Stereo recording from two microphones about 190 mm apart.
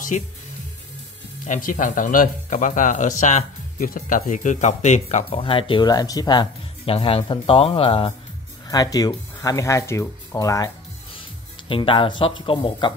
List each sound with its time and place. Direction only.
0.1 s speech: 40° left (ahead or behind)
1.4 s speech: 45° left (ahead or behind); by 10.7 s 15° left (ahead or behind)
11.7 s speech: 25° left (ahead or behind)